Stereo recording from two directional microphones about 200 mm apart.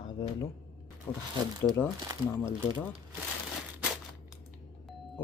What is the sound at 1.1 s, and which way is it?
Speech, 20° left (ahead or behind).